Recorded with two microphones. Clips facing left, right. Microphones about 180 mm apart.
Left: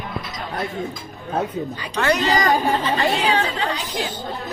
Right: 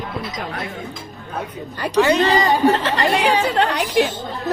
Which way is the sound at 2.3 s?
25° right (ahead or behind).